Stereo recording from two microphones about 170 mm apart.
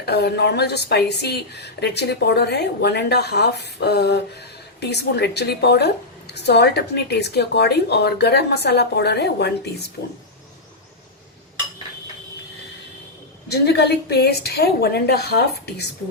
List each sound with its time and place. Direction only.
0.0 s a woman's voice: 75° left (ahead or behind)
13.5 s a woman's voice: 75° left (ahead or behind)